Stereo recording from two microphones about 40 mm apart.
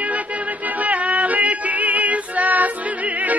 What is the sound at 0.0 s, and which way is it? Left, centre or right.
Music, right.